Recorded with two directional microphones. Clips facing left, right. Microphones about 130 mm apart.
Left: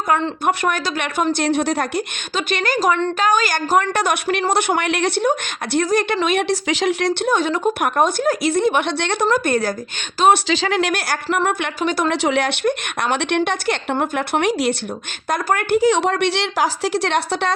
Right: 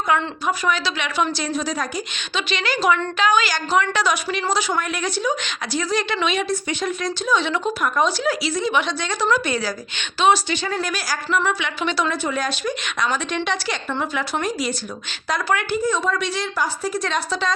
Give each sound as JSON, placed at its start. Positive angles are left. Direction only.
{"t": 0.4, "sound": "a woman's voice", "side_deg": 55}
{"t": 2.3, "sound": "a woman's voice", "side_deg": 50}
{"t": 6.5, "sound": "a woman's voice", "side_deg": 85}
{"t": 7.7, "sound": "a woman's voice", "side_deg": 60}
{"t": 10.3, "sound": "a woman's voice", "side_deg": 90}
{"t": 12.1, "sound": "a woman's voice", "side_deg": 75}
{"t": 15.3, "sound": "a woman's voice", "side_deg": 50}
{"t": 15.8, "sound": "speech", "side_deg": 70}